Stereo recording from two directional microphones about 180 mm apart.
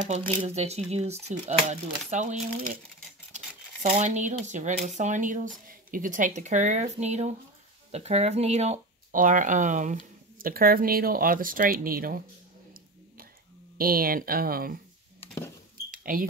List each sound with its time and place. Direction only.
0.4 s speech: 35° right (ahead or behind)
3.9 s speech: 40° right (ahead or behind)
10.4 s speech: 55° right (ahead or behind)
13.7 s speech: 55° right (ahead or behind)
15.9 s cash register: 50° right (ahead or behind)